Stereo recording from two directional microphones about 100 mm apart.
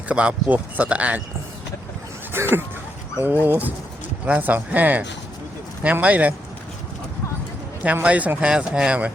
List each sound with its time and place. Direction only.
0.1 s speech: 10° right (ahead or behind)
2.3 s speech: 25° right (ahead or behind)
8.0 s speech: 15° right (ahead or behind)